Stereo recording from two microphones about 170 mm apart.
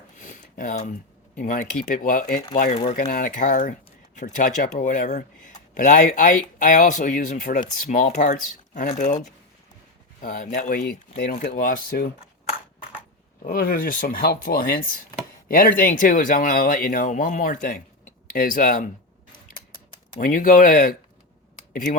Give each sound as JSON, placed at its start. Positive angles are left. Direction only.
{"t": 0.2, "sound": "a sound", "side_deg": 50}
{"t": 1.4, "sound": "speech", "side_deg": 55}
{"t": 10.2, "sound": "speech", "side_deg": 55}
{"t": 13.4, "sound": "speech", "side_deg": 60}
{"t": 20.1, "sound": "speech", "side_deg": 55}